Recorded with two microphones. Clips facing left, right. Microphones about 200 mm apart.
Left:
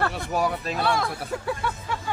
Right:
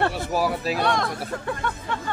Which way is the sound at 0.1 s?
Centre (ahead or behind).